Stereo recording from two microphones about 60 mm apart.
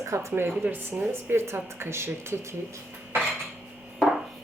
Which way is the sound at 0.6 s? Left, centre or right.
Right.